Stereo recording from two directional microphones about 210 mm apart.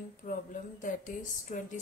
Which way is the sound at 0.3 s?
40° left (ahead or behind).